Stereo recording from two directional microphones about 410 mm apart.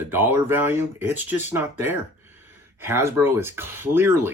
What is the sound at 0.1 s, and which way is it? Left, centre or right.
Speech, centre.